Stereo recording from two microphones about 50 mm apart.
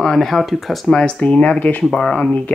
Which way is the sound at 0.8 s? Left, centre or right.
Centre.